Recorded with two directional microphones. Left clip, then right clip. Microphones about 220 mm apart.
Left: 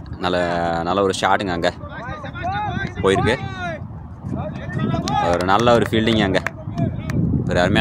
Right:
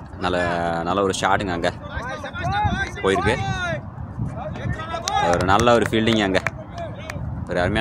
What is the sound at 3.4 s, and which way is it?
Vehicle, 35° right (ahead or behind).